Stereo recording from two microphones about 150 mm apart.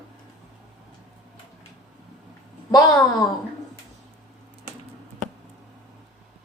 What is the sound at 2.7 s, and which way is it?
Speech, 20° left (ahead or behind).